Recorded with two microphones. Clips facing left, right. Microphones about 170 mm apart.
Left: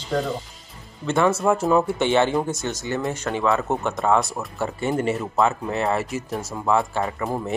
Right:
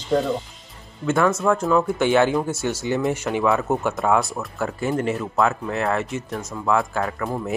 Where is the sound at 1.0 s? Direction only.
Centre (ahead or behind).